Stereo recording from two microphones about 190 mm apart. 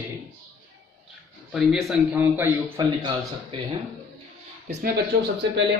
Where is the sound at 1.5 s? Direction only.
Centre (ahead or behind).